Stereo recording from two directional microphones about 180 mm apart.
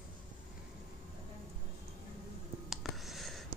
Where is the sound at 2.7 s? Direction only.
Centre (ahead or behind).